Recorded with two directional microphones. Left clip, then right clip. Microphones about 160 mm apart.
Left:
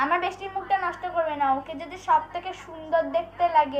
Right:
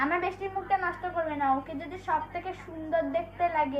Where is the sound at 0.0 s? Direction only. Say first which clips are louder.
Left 4 dB; 25° right (ahead or behind).